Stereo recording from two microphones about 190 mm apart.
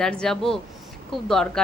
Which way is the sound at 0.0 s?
5° left (ahead or behind).